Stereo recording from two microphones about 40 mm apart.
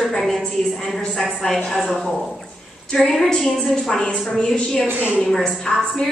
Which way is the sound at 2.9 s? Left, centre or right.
Centre.